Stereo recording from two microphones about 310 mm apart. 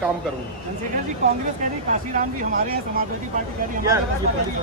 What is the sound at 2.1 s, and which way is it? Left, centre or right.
Speech, right.